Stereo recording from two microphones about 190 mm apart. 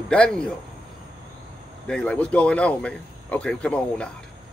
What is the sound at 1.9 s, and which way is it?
Speech, 5° left (ahead or behind).